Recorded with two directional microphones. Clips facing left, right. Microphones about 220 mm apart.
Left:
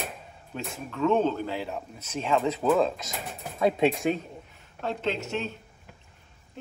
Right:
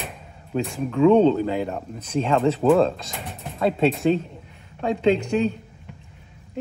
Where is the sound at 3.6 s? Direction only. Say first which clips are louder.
Right 3 dB; 15° left (ahead or behind).